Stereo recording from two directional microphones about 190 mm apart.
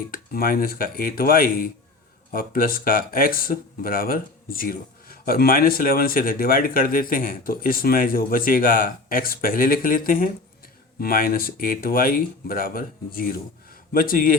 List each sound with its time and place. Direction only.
0.1 s speech: 50° left (ahead or behind)